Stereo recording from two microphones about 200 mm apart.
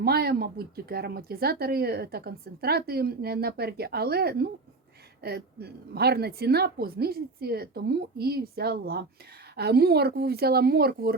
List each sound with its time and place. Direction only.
0.0 s speech: 50° right (ahead or behind)